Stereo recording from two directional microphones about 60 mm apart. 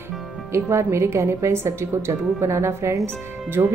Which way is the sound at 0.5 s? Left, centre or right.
Right.